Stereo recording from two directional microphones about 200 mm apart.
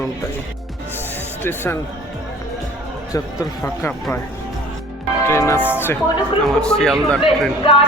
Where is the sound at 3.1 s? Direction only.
15° left (ahead or behind).